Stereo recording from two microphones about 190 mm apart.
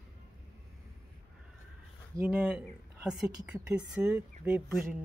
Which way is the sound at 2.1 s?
10° right (ahead or behind).